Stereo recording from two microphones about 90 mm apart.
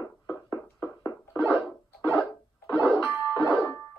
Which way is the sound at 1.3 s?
Centre (ahead or behind).